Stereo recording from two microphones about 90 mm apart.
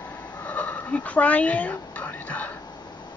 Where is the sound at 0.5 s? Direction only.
15° left (ahead or behind).